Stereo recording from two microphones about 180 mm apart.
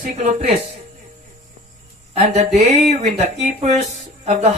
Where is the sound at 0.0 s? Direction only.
40° right (ahead or behind).